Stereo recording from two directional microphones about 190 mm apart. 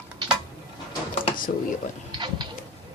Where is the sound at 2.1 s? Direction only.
25° right (ahead or behind).